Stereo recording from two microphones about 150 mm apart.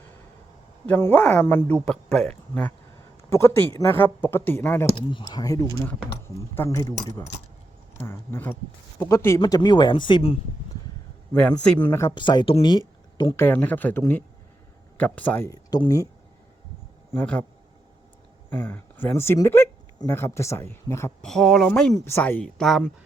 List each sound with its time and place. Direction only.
0.9 s speech: 15° left (ahead or behind)
3.2 s speech: 20° left (ahead or behind)
4.9 s speech: 35° left (ahead or behind)
11.3 s speech: 5° left (ahead or behind)
12.1 s speech: 30° left (ahead or behind)
13.3 s speech: 15° left (ahead or behind)
17.1 s speech: 10° left (ahead or behind)
18.5 s speech: 10° left (ahead or behind)
21.2 s speech: 5° left (ahead or behind)
21.9 s speech: 15° left (ahead or behind)